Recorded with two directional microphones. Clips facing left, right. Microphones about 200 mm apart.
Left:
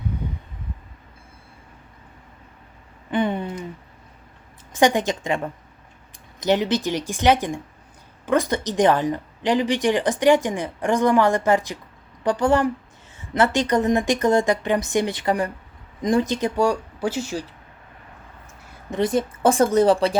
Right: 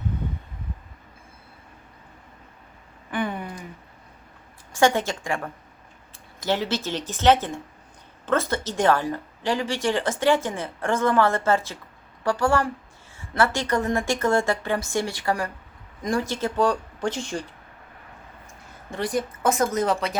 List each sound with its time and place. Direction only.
3.1 s a sound: 25° left (ahead or behind)
4.7 s speech: 15° left (ahead or behind)
18.9 s a woman's voice: 20° left (ahead or behind)